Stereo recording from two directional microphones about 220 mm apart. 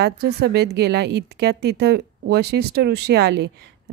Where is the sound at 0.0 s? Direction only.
45° right (ahead or behind).